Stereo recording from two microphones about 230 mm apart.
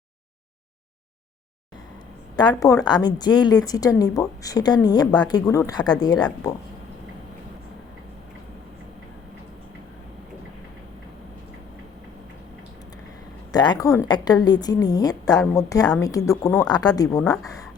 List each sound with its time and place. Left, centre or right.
2.3 s a woman's voice: centre
13.5 s speech: centre